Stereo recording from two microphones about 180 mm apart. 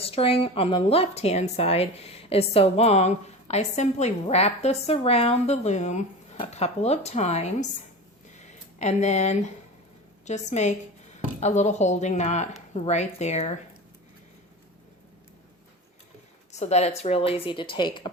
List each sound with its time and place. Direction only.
0.0 s speech: 30° left (ahead or behind)
8.4 s a sound: 40° left (ahead or behind)
10.2 s speech: 40° left (ahead or behind)
16.5 s speech: 40° left (ahead or behind)